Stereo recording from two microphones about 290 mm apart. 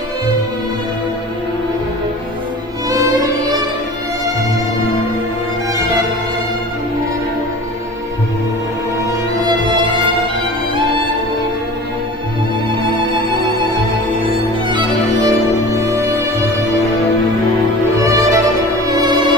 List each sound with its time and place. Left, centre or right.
2.9 s music: centre
14.7 s music: centre
18.0 s music: centre